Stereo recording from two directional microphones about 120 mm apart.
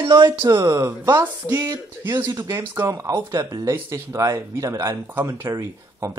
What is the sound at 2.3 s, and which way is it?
A man's voice, 30° right (ahead or behind).